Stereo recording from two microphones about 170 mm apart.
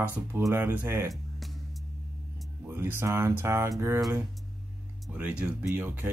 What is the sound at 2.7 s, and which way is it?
Speech, 10° right (ahead or behind).